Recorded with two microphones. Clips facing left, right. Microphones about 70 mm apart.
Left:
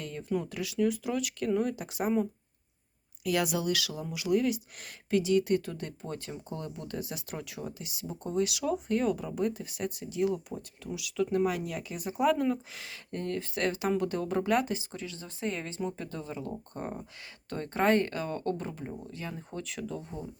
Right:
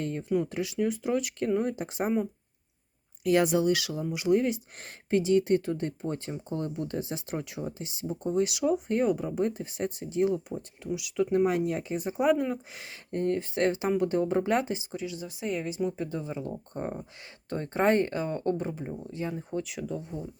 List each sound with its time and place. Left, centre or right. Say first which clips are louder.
0.0 s speech: right 5 dB; right
3.2 s speech: right 6 dB; right; by 20.1 s centre